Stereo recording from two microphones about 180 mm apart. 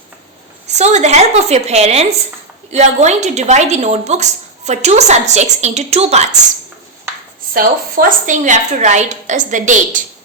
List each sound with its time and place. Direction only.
0.7 s a woman's voice: 40° right (ahead or behind)
7.5 s a woman's voice: 50° right (ahead or behind)